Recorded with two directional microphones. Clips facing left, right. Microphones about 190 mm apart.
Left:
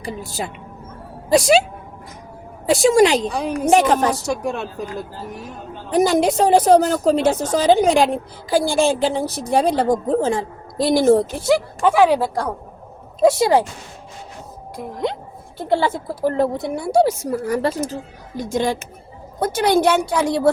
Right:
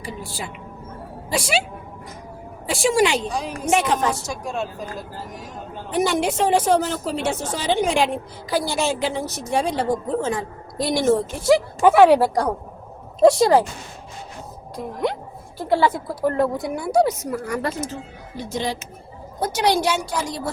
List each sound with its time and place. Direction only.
0.3 s a woman's voice: 45° left (ahead or behind)
2.6 s a woman's voice: 40° left (ahead or behind)
3.2 s a woman's voice: 60° left (ahead or behind)
3.7 s a woman's voice: 40° left (ahead or behind)
4.3 s a woman's voice: 65° left (ahead or behind)
5.9 s a woman's voice: 40° left (ahead or behind)
11.4 s a woman's voice: 5° right (ahead or behind)
15.5 s a woman's voice: 25° left (ahead or behind); by 20.5 s 60° left (ahead or behind)